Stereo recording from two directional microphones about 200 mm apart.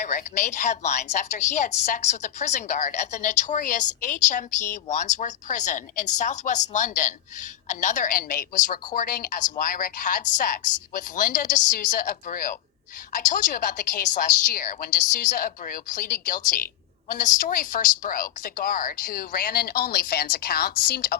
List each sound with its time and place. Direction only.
0.0 s a woman's voice: 40° left (ahead or behind)